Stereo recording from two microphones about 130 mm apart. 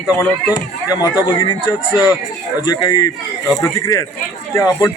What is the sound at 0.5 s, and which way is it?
A man's voice, 30° left (ahead or behind).